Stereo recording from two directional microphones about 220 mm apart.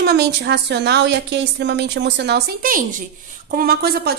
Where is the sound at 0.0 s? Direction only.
50° right (ahead or behind).